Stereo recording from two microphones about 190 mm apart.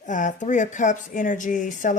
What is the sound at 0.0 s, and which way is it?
A woman's voice, 40° left (ahead or behind).